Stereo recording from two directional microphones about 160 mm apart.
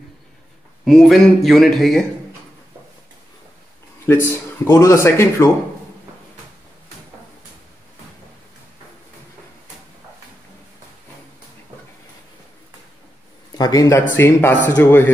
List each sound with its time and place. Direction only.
0.8 s a man's voice: centre (ahead or behind)
4.0 s speech: 15° left (ahead or behind)
13.6 s speech: 25° left (ahead or behind)